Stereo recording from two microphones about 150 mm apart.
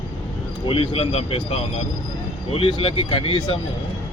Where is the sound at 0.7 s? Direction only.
40° left (ahead or behind).